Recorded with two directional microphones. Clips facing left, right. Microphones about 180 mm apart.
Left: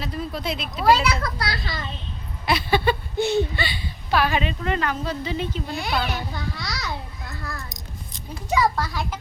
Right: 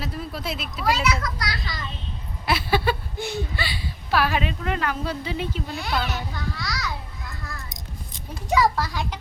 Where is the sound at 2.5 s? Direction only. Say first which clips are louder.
Left 2 dB; 5° right (ahead or behind).